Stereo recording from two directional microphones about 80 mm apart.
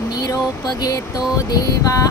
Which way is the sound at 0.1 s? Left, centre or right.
Left.